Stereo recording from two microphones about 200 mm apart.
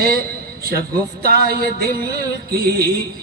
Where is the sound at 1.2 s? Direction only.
50° right (ahead or behind).